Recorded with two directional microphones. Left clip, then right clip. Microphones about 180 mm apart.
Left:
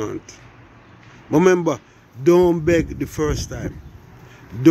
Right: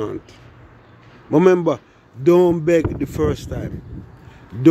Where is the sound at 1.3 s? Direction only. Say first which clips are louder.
Right 1 dB; 5° right (ahead or behind).